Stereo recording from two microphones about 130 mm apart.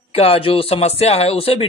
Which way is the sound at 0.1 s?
50° left (ahead or behind).